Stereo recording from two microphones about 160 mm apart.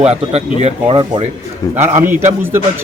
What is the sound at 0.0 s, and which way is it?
Speech, 40° right (ahead or behind).